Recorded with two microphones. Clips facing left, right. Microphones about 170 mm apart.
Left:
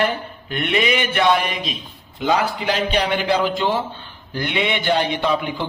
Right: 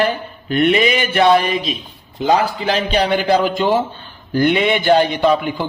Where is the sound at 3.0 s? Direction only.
40° right (ahead or behind).